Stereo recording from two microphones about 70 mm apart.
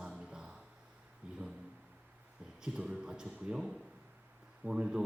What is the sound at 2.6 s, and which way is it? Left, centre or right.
A man's voice, centre.